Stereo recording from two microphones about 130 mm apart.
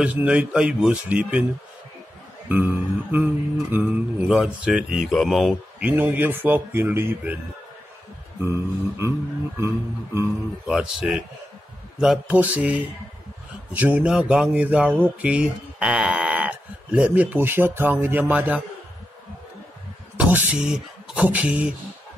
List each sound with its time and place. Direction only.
0.0 s speech: 10° right (ahead or behind)
2.4 s speech: 15° right (ahead or behind)
5.8 s speech: 10° right (ahead or behind)
8.4 s a sound: 20° right (ahead or behind)
10.7 s speech: 5° right (ahead or behind)
20.2 s speech: 15° right (ahead or behind)